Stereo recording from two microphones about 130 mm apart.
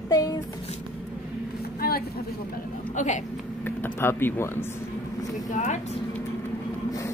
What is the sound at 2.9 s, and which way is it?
Speech, 65° left (ahead or behind).